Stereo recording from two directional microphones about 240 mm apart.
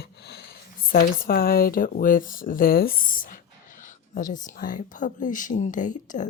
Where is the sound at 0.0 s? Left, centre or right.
Left.